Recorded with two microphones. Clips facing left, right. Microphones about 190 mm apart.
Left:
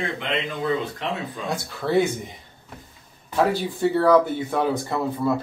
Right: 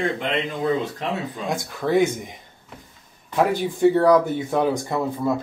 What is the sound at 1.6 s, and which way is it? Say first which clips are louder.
Speech: right 2 dB; 15° right (ahead or behind).